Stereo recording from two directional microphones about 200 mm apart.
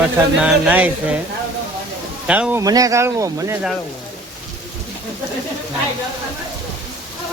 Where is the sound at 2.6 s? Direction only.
15° right (ahead or behind).